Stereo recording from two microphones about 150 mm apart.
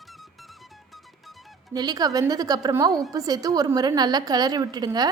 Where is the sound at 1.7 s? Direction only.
25° right (ahead or behind).